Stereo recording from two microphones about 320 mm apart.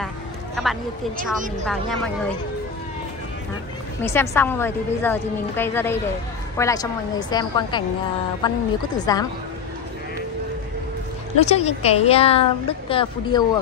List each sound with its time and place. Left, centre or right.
1.7 s speech: centre
4.0 s a woman's voice: centre
11.4 s a woman's voice: centre